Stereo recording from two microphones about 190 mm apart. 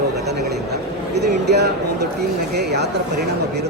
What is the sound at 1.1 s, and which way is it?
A man's voice, 60° right (ahead or behind).